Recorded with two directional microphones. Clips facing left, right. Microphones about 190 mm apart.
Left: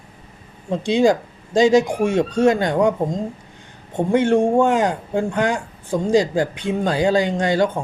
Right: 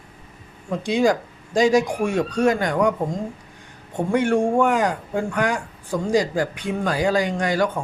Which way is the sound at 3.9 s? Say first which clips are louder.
Left 3 dB; 25° left (ahead or behind).